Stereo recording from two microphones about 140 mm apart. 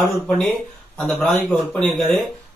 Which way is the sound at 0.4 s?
5° left (ahead or behind).